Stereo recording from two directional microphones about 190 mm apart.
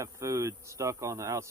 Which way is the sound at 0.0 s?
15° right (ahead or behind).